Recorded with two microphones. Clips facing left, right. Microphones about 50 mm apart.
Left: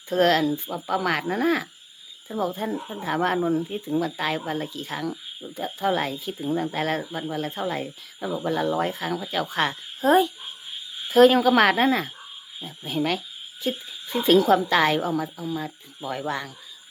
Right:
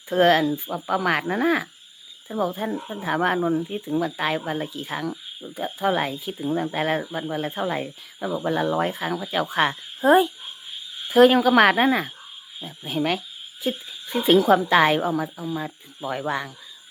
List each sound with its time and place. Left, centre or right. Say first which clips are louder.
0.1 s speech: right 2 dB; centre